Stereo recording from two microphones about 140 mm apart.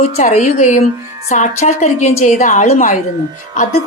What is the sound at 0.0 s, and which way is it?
A woman's voice, 55° left (ahead or behind).